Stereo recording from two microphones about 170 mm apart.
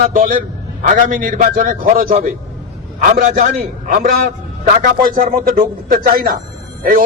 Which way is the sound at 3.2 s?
55° right (ahead or behind).